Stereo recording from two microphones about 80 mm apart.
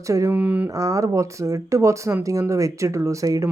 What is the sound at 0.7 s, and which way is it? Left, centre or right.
Speech, right.